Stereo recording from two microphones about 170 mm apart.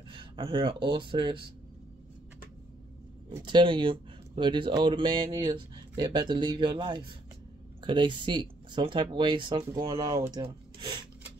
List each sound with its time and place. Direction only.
0.1 s speech: 30° right (ahead or behind)
3.4 s speech: 30° right (ahead or behind)